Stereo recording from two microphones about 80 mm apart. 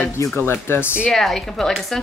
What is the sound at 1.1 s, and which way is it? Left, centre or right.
Speech, centre.